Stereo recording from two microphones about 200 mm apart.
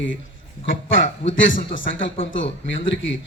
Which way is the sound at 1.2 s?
70° left (ahead or behind).